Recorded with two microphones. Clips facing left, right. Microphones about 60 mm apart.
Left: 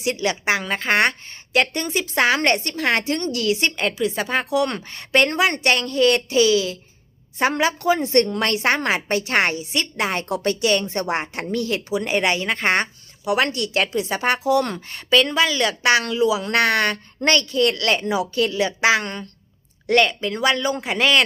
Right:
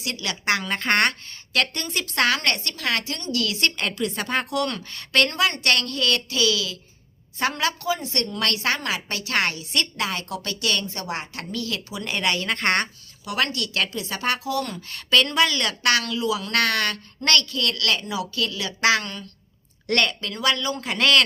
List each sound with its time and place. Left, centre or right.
0.0 s a woman's voice: left
0.4 s speech: centre
1.3 s a woman's voice: centre; by 3.3 s left
3.3 s a woman's voice: left
3.8 s speech: centre
4.6 s a woman's voice: left
7.9 s a woman's voice: left
15.1 s a woman's voice: centre; by 18.7 s left
18.8 s speech: centre
20.3 s a woman's voice: left